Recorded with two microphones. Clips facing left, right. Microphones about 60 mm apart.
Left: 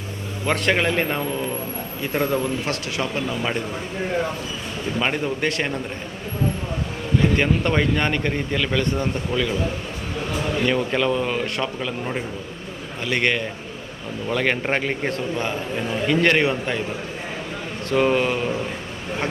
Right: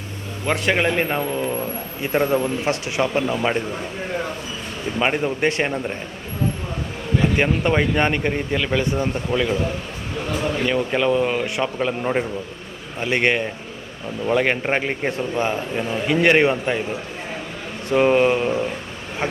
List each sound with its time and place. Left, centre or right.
0.4 s a man's voice: centre
4.9 s a man's voice: centre
7.2 s a man's voice: centre
10.7 s a man's voice: centre
11.8 s a man's voice: right
17.8 s a man's voice: centre